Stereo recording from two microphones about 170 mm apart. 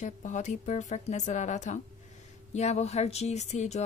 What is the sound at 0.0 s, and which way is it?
A woman's voice, 45° left (ahead or behind).